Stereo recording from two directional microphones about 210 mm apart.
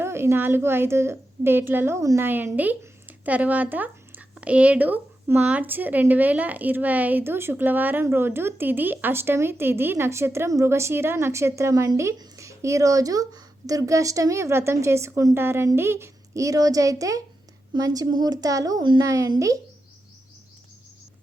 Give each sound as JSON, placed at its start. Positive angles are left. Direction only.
{"t": 0.0, "sound": "a woman's voice", "side_deg": -10}